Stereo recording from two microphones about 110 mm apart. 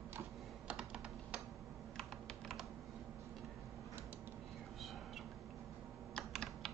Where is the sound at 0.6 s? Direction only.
5° right (ahead or behind).